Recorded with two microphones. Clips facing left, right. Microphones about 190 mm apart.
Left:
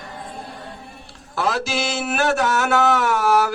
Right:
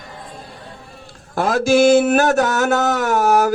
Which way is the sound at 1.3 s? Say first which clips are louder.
Right 8 dB; 45° right (ahead or behind).